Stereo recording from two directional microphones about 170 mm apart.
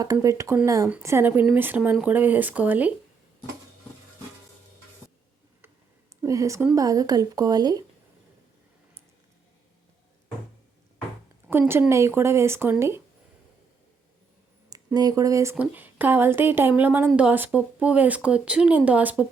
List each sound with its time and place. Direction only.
0.0 s speech: 20° right (ahead or behind)
6.2 s a woman's voice: 20° right (ahead or behind)
11.4 s speech: 10° right (ahead or behind)
14.9 s speech: 20° right (ahead or behind)